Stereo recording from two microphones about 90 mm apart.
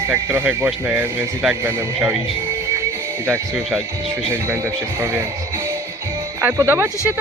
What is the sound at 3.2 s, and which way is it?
Speech, 30° right (ahead or behind).